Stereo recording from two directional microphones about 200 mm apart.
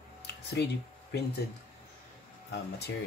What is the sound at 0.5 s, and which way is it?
Speech, 55° left (ahead or behind).